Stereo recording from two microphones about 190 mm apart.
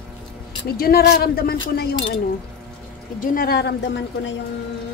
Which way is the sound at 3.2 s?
45° left (ahead or behind).